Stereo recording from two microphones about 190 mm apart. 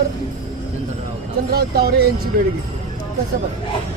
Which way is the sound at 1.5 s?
55° right (ahead or behind).